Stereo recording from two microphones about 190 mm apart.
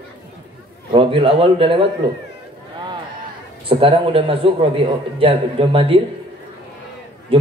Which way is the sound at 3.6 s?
30° right (ahead or behind).